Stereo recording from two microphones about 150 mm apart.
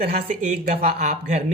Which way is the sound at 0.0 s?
50° right (ahead or behind).